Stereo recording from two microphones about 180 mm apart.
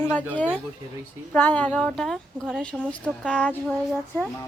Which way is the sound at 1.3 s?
10° left (ahead or behind).